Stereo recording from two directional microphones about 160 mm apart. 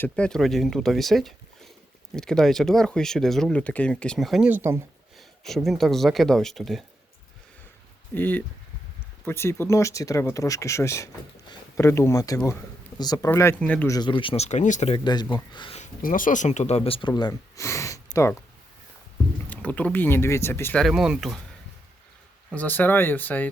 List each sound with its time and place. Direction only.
0.0 s speech: 5° left (ahead or behind); by 4.8 s 15° right (ahead or behind)
5.4 s speech: centre (ahead or behind)
8.1 s speech: 10° left (ahead or behind)
13.9 s speech: 30° left (ahead or behind); by 14.9 s 45° left (ahead or behind)
14.9 s speech: 25° left (ahead or behind)
15.8 s speech: 60° left (ahead or behind); by 17.1 s 35° left (ahead or behind)
17.2 s speech: 20° left (ahead or behind)
19.5 s speech: 10° left (ahead or behind)
20.8 s speech: 5° right (ahead or behind)
22.5 s speech: 10° left (ahead or behind)